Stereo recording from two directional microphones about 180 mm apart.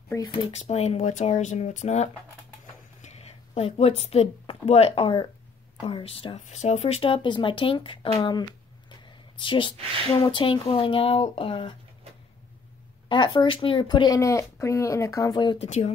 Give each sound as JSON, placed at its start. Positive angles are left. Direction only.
{"t": 0.5, "sound": "speech", "side_deg": 40}
{"t": 13.1, "sound": "speech", "side_deg": 25}
{"t": 15.6, "sound": "speech", "side_deg": 35}